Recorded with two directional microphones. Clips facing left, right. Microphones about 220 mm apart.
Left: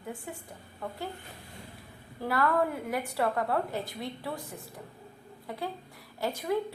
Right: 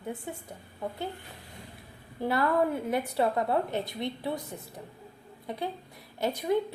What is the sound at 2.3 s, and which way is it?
A woman's voice, 25° right (ahead or behind).